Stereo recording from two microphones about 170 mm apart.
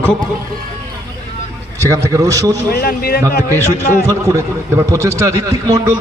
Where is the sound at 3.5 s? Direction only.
20° right (ahead or behind).